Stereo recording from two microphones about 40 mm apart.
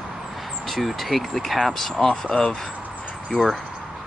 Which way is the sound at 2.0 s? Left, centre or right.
Centre.